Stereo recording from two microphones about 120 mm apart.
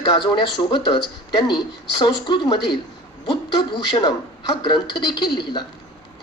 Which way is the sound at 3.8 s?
40° left (ahead or behind).